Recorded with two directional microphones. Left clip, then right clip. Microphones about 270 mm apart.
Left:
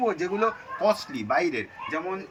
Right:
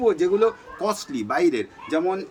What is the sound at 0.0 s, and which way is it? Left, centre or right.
A man's voice, centre.